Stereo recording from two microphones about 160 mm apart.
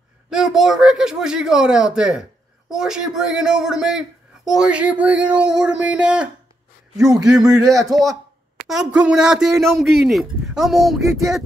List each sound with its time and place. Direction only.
0.3 s speech: 5° right (ahead or behind)
7.0 s a man's voice: 25° right (ahead or behind)
7.5 s speech: centre (ahead or behind)